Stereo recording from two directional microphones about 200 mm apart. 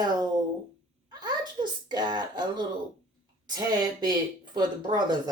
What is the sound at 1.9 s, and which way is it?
Speech, 20° right (ahead or behind).